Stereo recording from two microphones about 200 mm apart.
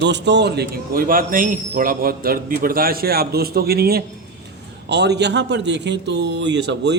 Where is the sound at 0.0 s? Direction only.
60° right (ahead or behind).